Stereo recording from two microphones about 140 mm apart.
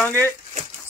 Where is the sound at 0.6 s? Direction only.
60° right (ahead or behind).